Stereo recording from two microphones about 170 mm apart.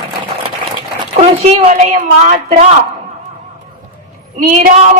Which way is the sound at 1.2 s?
40° right (ahead or behind).